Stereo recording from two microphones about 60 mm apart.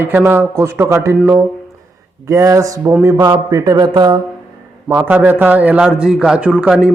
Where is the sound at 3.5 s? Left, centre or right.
Right.